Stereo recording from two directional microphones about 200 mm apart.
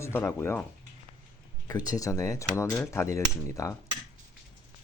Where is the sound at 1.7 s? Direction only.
20° left (ahead or behind).